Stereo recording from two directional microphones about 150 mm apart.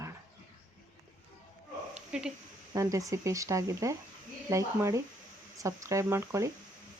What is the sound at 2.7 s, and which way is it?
Speech, 20° right (ahead or behind).